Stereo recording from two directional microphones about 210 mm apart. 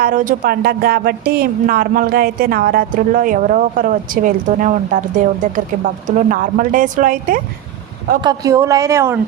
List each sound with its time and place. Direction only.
0.0 s a woman's voice: 40° right (ahead or behind)
8.2 s speech: 15° right (ahead or behind)